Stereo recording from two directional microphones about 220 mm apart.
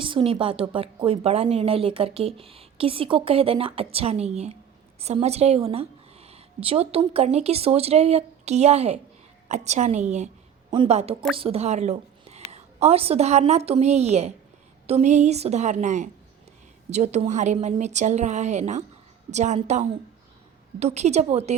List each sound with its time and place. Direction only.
0.0 s a woman's voice: 25° right (ahead or behind)